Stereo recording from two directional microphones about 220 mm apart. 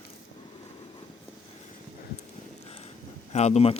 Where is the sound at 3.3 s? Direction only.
30° left (ahead or behind).